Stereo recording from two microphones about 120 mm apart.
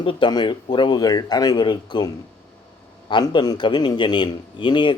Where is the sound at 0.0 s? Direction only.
45° left (ahead or behind).